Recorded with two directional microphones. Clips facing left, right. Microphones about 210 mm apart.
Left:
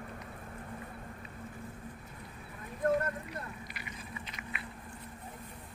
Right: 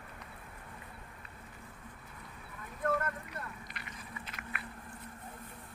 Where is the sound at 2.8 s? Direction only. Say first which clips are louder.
Left 4 dB; 30° left (ahead or behind).